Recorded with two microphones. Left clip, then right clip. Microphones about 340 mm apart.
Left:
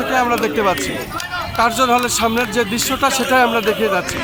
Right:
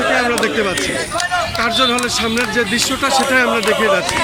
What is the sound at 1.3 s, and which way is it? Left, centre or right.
Speech, centre.